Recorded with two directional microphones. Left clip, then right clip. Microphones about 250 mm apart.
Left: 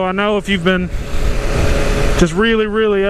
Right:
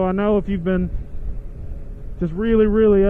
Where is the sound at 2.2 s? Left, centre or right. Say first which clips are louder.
Left 1 dB; centre.